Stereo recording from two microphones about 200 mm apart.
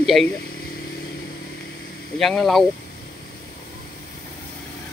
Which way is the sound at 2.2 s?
Centre (ahead or behind).